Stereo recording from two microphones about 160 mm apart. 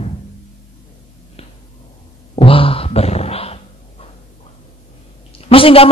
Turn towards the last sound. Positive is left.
turn(degrees=35)  # may be behind; listen again after turning